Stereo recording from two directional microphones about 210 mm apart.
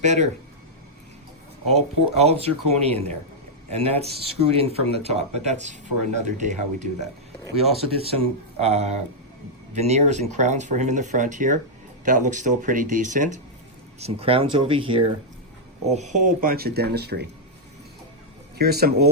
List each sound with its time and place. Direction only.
0.0 s speech: 35° right (ahead or behind)
1.6 s speech: 30° right (ahead or behind)
14.0 s speech: 25° right (ahead or behind); by 17.2 s 50° right (ahead or behind)
18.5 s speech: 50° right (ahead or behind)